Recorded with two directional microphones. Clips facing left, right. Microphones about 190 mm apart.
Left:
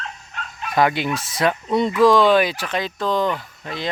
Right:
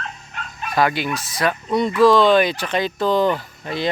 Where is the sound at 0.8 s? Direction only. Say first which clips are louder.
Left 1 dB; 20° left (ahead or behind).